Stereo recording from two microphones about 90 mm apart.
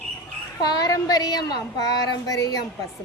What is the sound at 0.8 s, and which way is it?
Speech, 45° left (ahead or behind).